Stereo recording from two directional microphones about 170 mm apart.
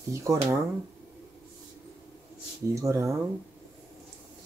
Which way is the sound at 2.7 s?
20° right (ahead or behind).